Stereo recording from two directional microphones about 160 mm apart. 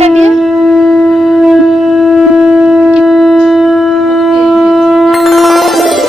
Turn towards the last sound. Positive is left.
turn(degrees=0)  # may be behind; listen again after turning